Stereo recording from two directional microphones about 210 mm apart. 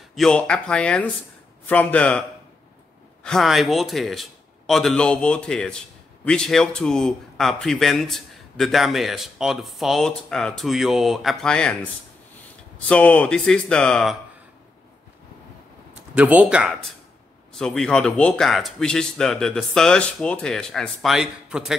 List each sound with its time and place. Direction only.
0.1 s speech: 5° left (ahead or behind)
3.3 s speech: centre (ahead or behind)
15.9 s speech: 5° right (ahead or behind)